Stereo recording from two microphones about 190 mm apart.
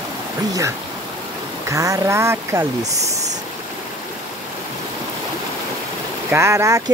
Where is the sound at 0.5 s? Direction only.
15° right (ahead or behind).